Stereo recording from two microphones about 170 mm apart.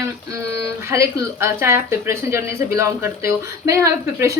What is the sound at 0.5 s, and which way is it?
A woman's voice, 15° right (ahead or behind).